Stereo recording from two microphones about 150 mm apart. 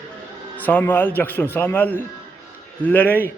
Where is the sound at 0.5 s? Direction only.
10° left (ahead or behind).